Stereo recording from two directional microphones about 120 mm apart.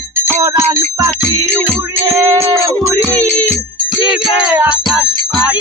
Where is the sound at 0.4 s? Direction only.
25° right (ahead or behind).